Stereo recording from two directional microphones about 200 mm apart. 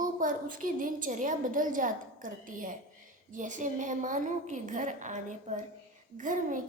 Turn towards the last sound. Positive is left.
turn(degrees=-40)  # may be behind; listen again after turning